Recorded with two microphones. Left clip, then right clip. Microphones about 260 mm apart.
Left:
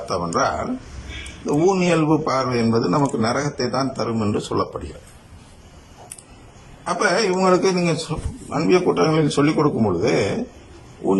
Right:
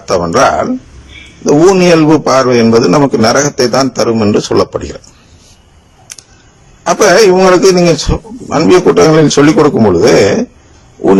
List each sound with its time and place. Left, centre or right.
0.0 s a man's voice: right
6.8 s a man's voice: right